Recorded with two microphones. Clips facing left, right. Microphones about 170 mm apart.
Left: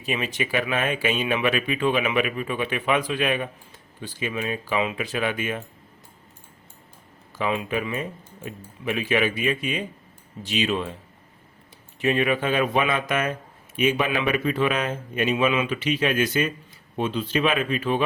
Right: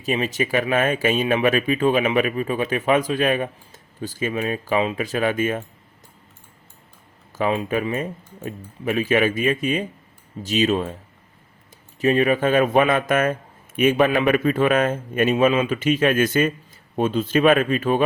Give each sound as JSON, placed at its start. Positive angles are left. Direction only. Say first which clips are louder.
{"t": 0.0, "sound": "speech", "louder": "right 5 dB", "side_deg": -40}
{"t": 7.3, "sound": "a man's voice", "louder": "right 4 dB", "side_deg": -40}
{"t": 11.9, "sound": "a man's voice", "louder": "right 4 dB", "side_deg": -40}